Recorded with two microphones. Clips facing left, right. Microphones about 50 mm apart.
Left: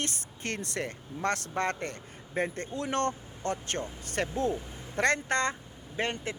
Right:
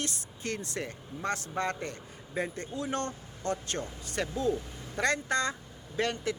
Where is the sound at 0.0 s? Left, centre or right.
Left.